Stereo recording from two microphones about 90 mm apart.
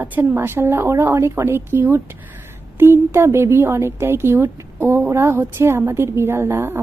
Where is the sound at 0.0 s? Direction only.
20° right (ahead or behind).